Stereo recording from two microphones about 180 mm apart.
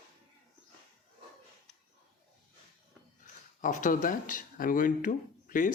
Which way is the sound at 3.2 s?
45° left (ahead or behind).